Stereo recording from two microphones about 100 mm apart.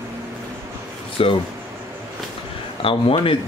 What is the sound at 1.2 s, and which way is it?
Speech, 70° left (ahead or behind).